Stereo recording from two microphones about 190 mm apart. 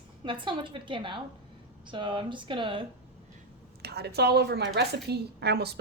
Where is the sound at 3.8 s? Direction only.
60° right (ahead or behind).